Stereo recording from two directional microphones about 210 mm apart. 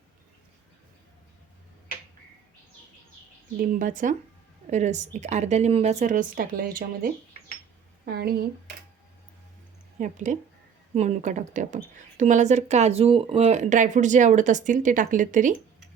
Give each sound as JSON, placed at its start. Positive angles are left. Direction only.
{"t": 3.6, "sound": "speech", "side_deg": -40}
{"t": 10.0, "sound": "speech", "side_deg": -35}